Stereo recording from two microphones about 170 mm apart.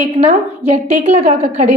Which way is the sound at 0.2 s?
35° right (ahead or behind).